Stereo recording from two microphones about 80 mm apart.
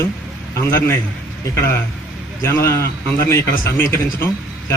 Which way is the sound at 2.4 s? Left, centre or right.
Left.